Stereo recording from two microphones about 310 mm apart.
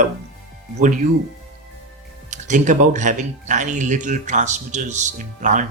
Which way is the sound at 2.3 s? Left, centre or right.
Right.